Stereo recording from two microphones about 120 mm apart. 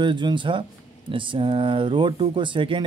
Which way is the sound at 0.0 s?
40° right (ahead or behind).